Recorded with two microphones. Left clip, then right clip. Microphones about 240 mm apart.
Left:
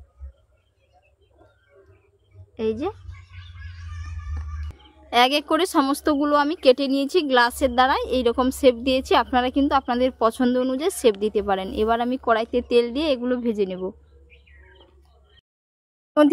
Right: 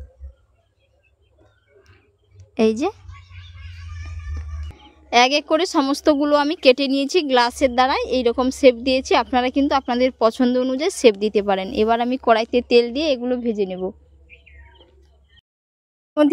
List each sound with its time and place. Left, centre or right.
2.5 s a woman's voice: right
4.7 s speech: centre
16.1 s speech: centre